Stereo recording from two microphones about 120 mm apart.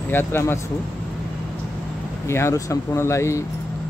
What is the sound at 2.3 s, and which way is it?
Speech, 20° left (ahead or behind).